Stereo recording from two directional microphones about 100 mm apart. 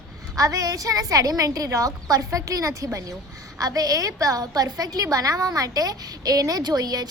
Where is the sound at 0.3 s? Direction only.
35° right (ahead or behind).